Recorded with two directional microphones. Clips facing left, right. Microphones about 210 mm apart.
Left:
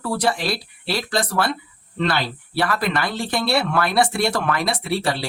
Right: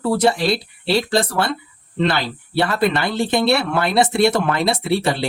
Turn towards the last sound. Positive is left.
turn(degrees=-25)  # may be behind; listen again after turning